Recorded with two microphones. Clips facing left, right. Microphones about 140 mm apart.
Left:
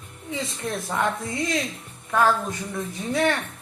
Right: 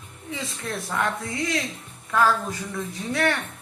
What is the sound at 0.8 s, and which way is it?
A woman's voice, 20° left (ahead or behind).